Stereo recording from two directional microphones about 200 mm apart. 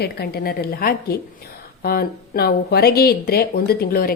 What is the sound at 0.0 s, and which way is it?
Speech, 50° left (ahead or behind).